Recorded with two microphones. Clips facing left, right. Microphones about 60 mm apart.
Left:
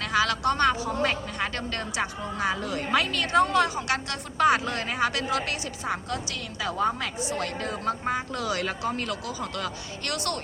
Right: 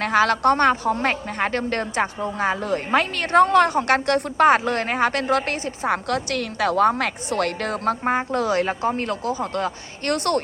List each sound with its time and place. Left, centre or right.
0.0 s a woman's voice: right
5.9 s a woman's voice: right
8.0 s a woman's voice: right